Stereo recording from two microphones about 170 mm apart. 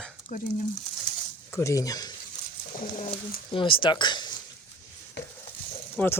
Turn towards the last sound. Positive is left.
turn(degrees=10)  # may be behind; listen again after turning